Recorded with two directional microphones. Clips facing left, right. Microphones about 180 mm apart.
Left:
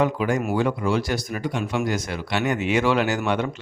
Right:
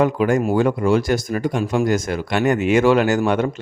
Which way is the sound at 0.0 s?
50° right (ahead or behind).